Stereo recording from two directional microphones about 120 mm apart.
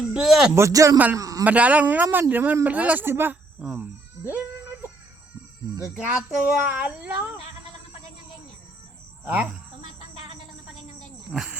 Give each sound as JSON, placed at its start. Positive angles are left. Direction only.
{"t": 0.1, "sound": "a man's voice", "side_deg": -5}
{"t": 0.5, "sound": "a man's voice", "side_deg": -25}
{"t": 1.5, "sound": "speech", "side_deg": -10}
{"t": 4.3, "sound": "music", "side_deg": -20}
{"t": 6.1, "sound": "speech", "side_deg": -10}
{"t": 9.2, "sound": "speech", "side_deg": -10}
{"t": 11.3, "sound": "speech", "side_deg": -5}